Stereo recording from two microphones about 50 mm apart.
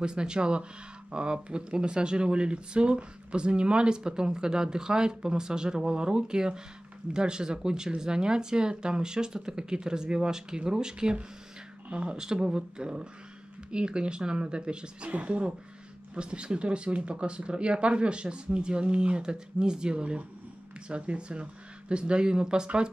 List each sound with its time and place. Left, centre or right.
0.0 s speech: centre